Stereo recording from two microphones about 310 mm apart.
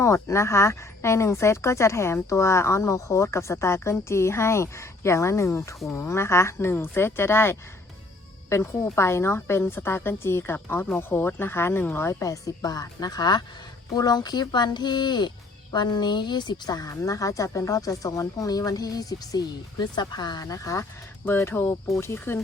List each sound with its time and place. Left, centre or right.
0.0 s speech: centre